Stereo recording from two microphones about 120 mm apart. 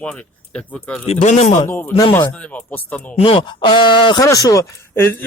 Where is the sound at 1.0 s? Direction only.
70° left (ahead or behind).